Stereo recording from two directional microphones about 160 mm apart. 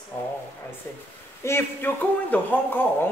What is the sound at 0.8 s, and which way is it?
A man's voice, 15° left (ahead or behind).